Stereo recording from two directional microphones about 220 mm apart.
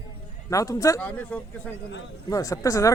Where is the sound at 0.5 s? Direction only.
15° left (ahead or behind).